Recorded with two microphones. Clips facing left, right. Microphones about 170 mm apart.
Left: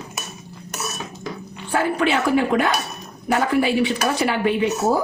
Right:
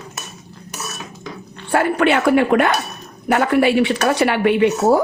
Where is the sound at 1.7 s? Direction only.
65° right (ahead or behind).